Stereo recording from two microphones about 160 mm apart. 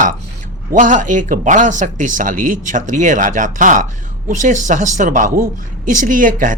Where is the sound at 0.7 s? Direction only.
50° right (ahead or behind).